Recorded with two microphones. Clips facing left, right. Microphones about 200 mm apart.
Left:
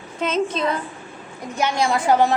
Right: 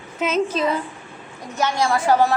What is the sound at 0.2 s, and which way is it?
Speech, 5° right (ahead or behind).